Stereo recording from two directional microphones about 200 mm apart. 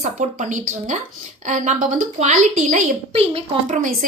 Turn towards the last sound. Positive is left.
turn(degrees=-35)  # may be behind; listen again after turning